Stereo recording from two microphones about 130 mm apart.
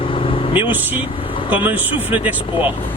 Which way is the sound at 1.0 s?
40° left (ahead or behind).